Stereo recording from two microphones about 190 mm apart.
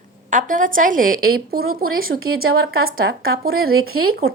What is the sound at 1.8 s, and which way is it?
Speech, 90° right.